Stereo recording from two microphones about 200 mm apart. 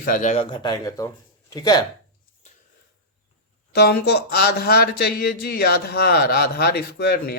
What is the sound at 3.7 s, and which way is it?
Speech, 55° left (ahead or behind).